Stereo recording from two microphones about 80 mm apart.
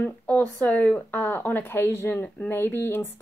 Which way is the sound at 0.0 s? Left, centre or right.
Centre.